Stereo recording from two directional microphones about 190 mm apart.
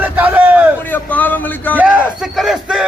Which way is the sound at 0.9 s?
10° left (ahead or behind).